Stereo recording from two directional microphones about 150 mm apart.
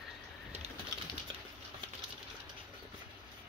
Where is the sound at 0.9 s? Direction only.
25° right (ahead or behind).